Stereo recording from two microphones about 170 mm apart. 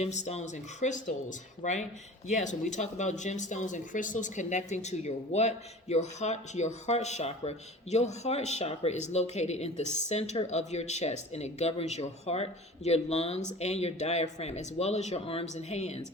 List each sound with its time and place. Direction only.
0.0 s speech: 40° left (ahead or behind)